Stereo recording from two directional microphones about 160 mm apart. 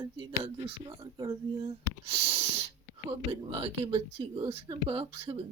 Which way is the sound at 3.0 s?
35° right (ahead or behind).